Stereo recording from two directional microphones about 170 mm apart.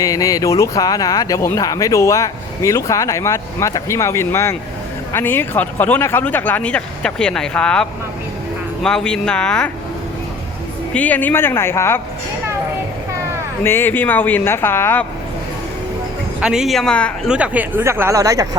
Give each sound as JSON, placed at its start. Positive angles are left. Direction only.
{"t": 0.0, "sound": "speech", "side_deg": 20}
{"t": 10.9, "sound": "speech", "side_deg": 10}
{"t": 13.7, "sound": "speech", "side_deg": 15}
{"t": 16.4, "sound": "speech", "side_deg": -5}
{"t": 17.2, "sound": "speech", "side_deg": -5}